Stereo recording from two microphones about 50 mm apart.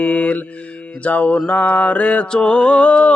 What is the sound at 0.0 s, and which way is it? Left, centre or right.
Mantra, left.